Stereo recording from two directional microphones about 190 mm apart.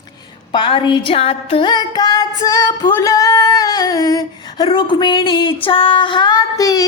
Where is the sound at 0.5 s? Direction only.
25° left (ahead or behind).